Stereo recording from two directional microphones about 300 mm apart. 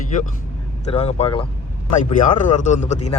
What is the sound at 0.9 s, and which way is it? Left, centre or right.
Speech, left.